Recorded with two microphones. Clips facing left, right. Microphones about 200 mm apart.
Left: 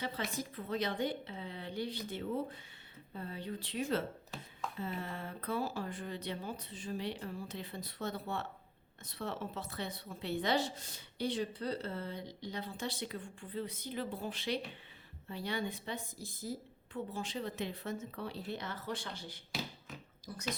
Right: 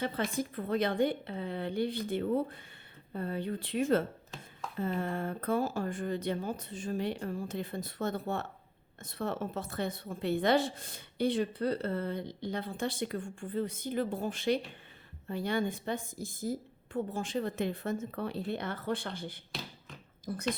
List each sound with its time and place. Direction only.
0.0 s a woman's voice: 55° right (ahead or behind)